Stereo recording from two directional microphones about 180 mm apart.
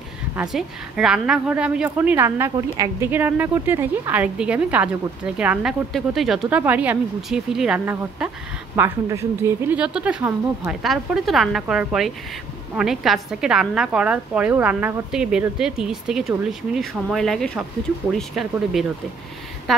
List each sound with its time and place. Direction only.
0.4 s a woman's voice: centre (ahead or behind)